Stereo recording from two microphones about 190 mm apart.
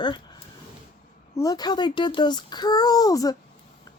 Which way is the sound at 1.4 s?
20° left (ahead or behind).